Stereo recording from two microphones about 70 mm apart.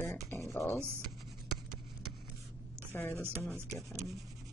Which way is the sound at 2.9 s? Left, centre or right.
Left.